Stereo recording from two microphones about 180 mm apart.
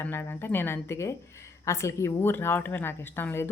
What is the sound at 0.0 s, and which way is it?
A woman's voice, 10° left (ahead or behind).